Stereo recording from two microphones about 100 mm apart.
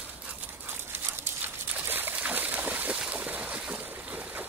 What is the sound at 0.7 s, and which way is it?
Dog, 20° right (ahead or behind).